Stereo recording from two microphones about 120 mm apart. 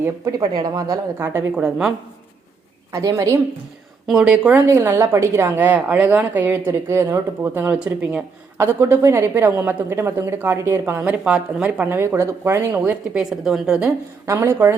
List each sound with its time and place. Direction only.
0.3 s speech: 35° right (ahead or behind)
1.2 s a woman's voice: 20° right (ahead or behind)
1.5 s a woman's voice: 5° right (ahead or behind)
2.9 s a woman's voice: 25° right (ahead or behind)
4.0 s speech: 5° right (ahead or behind)
4.6 s a woman's voice: 25° right (ahead or behind)
12.8 s a woman's voice: 10° right (ahead or behind)
14.3 s a woman's voice: 25° right (ahead or behind)